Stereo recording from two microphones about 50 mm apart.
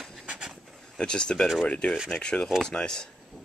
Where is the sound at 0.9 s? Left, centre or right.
Centre.